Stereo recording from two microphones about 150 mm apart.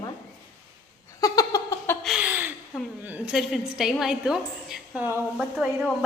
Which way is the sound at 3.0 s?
10° right (ahead or behind).